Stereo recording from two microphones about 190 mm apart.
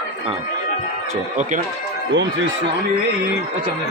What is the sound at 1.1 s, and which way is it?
Speech, 40° right (ahead or behind).